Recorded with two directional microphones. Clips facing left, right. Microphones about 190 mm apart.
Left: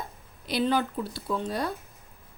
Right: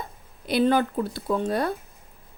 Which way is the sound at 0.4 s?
55° right (ahead or behind).